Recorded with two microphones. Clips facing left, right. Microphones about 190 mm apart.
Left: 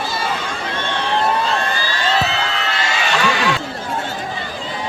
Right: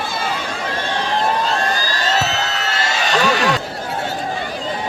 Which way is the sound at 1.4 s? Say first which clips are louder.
Right 1 dB; 40° right (ahead or behind).